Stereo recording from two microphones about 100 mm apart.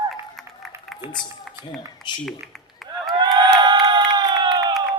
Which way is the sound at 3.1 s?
45° right (ahead or behind).